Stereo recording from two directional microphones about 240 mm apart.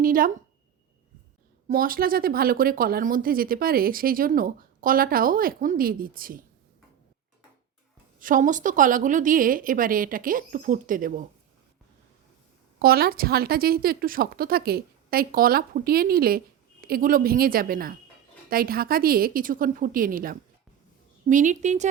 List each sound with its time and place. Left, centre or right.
0.0 s speech: right
1.6 s speech: right
8.2 s speech: right
12.8 s speech: right